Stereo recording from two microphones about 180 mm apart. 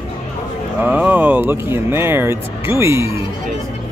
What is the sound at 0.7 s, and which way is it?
Speech, 10° right (ahead or behind).